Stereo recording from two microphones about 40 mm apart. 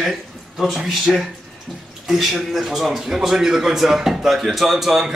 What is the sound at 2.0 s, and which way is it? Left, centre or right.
Speech, centre.